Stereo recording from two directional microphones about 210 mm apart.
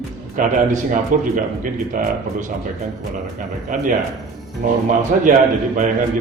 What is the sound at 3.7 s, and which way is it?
A man's voice, 40° right (ahead or behind).